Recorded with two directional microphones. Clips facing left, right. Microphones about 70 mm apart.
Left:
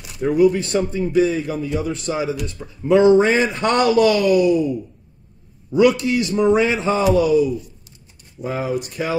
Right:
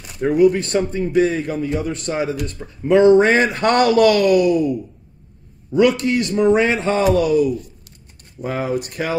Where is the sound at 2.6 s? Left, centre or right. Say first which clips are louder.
Right 1 dB; centre.